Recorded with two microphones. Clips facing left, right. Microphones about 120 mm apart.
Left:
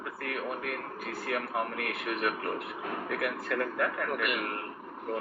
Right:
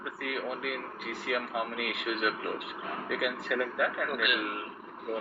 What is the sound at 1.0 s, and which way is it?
Speech, 40° left (ahead or behind).